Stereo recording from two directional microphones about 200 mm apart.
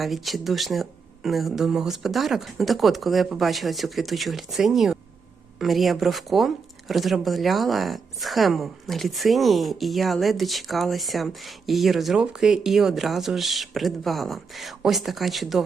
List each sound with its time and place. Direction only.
0.0 s speech: centre (ahead or behind)